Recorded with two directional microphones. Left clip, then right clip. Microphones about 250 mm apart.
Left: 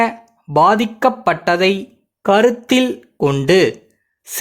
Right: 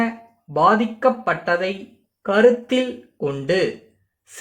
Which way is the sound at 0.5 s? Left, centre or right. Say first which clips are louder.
Left 4 dB; left.